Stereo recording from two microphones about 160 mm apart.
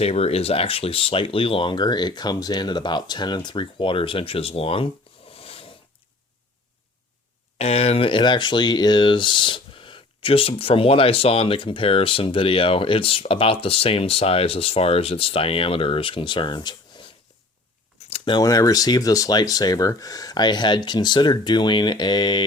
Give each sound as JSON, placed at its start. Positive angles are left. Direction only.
{"t": 0.0, "sound": "speech", "side_deg": 40}
{"t": 5.3, "sound": "a sound", "side_deg": 35}
{"t": 7.6, "sound": "speech", "side_deg": 40}
{"t": 18.1, "sound": "speech", "side_deg": 30}